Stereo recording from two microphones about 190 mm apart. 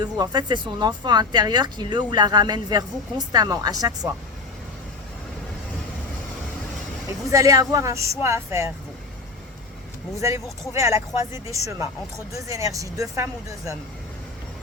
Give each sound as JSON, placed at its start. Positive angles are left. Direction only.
{"t": 0.0, "sound": "speech", "side_deg": -20}
{"t": 7.3, "sound": "speech", "side_deg": -15}
{"t": 10.2, "sound": "speech", "side_deg": -15}